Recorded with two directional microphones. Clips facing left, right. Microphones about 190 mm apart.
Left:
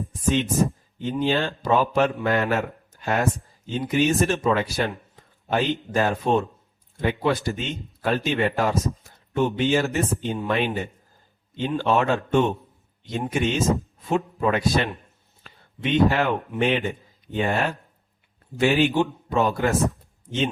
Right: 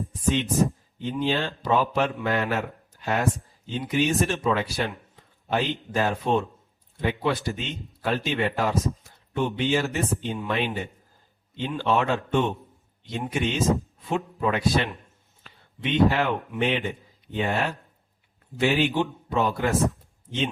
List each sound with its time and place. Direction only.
0.1 s a man's voice: 45° left (ahead or behind)
15.4 s a sound: 45° left (ahead or behind)
16.6 s a man's voice: 50° left (ahead or behind)